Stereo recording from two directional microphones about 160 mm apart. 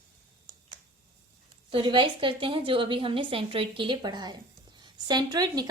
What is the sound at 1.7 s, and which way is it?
A woman's voice, 30° right (ahead or behind).